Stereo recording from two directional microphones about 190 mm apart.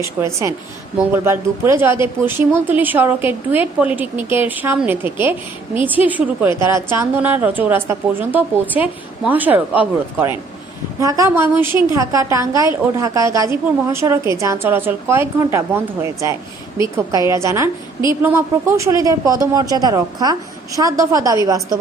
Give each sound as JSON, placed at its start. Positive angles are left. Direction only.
{"t": 0.0, "sound": "a woman's voice", "side_deg": -15}